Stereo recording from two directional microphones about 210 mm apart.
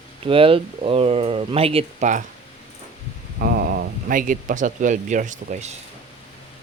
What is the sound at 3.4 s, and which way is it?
Speech, 45° right (ahead or behind).